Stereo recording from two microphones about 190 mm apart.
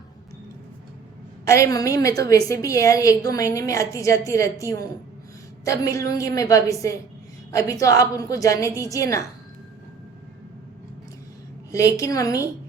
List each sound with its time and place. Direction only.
1.5 s a woman's voice: 15° left (ahead or behind)
11.7 s a woman's voice: 15° left (ahead or behind)